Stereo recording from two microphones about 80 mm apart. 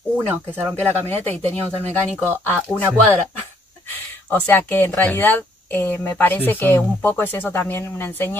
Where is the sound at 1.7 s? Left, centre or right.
Right.